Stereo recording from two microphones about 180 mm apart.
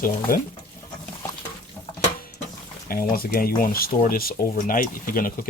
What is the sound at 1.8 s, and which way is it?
Water, 15° left (ahead or behind).